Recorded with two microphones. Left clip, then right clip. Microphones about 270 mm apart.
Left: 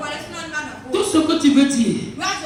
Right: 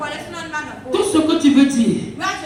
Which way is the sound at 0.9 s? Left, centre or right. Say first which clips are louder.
Right 2 dB; right.